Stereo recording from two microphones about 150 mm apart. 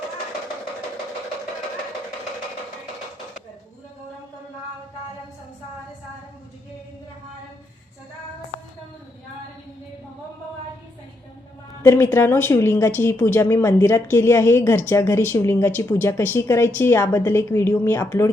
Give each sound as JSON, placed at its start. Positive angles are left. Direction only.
{"t": 11.8, "sound": "speech", "side_deg": 15}